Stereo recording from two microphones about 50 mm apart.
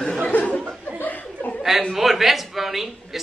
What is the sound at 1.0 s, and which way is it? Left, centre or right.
Chuckle, left.